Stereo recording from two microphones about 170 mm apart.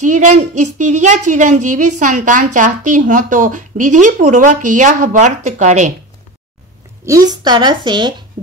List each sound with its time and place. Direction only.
0.0 s a woman's voice: 45° right (ahead or behind)
7.1 s a woman's voice: 20° right (ahead or behind)